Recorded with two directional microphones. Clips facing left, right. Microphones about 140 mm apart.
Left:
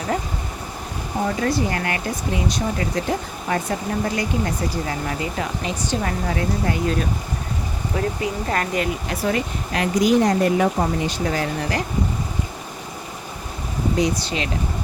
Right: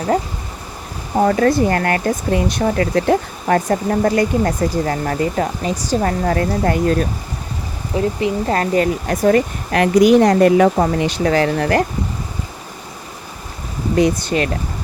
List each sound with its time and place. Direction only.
1.2 s speech: 55° right (ahead or behind)
3.7 s speech: 50° right (ahead or behind)
7.9 s speech: 30° right (ahead or behind); by 11.9 s 60° right (ahead or behind)
13.9 s speech: 55° right (ahead or behind)